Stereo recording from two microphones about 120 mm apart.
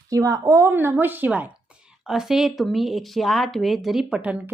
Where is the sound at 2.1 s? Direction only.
5° right (ahead or behind).